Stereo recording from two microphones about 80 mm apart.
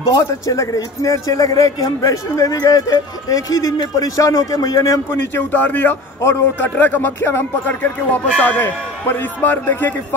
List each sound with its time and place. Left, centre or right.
0.1 s a man's voice: left
5.5 s speech: left